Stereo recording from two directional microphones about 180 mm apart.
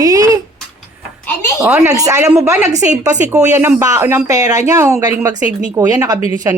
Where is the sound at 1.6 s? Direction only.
15° right (ahead or behind).